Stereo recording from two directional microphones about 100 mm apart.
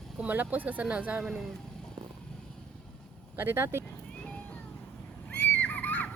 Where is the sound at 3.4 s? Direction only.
25° right (ahead or behind).